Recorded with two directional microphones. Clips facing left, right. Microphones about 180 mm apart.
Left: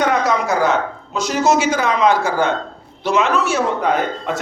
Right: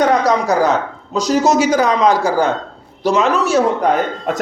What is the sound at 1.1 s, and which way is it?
A man's voice, 35° right (ahead or behind).